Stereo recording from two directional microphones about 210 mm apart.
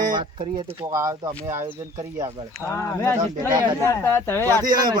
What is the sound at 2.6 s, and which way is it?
Speech, 15° left (ahead or behind).